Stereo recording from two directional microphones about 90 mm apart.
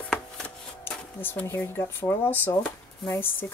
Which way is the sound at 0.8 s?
25° left (ahead or behind).